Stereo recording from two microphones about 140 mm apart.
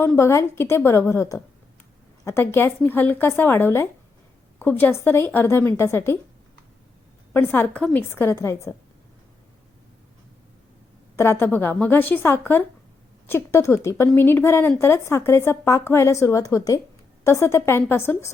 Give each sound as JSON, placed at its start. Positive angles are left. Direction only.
{"t": 0.0, "sound": "a woman's voice", "side_deg": 15}
{"t": 7.3, "sound": "a woman's voice", "side_deg": 15}
{"t": 11.2, "sound": "a woman's voice", "side_deg": 15}